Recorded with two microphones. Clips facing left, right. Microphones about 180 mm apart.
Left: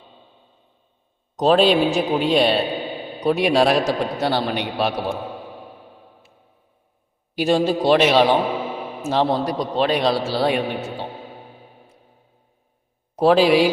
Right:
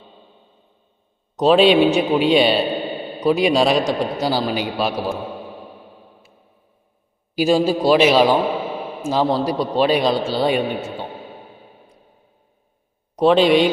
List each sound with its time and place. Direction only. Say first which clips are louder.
1.4 s a man's voice: right 3 dB; centre (ahead or behind)
7.3 s a man's voice: right 2 dB; 5° right (ahead or behind)
13.1 s a man's voice: right 1 dB; 5° left (ahead or behind)